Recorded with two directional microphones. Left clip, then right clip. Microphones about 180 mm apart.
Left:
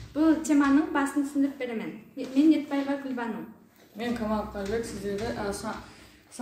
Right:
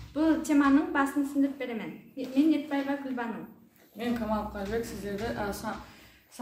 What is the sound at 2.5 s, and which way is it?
Speech, 15° left (ahead or behind).